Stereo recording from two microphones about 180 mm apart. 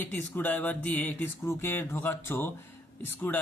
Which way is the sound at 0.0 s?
10° left (ahead or behind).